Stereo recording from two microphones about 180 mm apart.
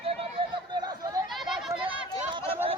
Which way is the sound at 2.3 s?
30° right (ahead or behind).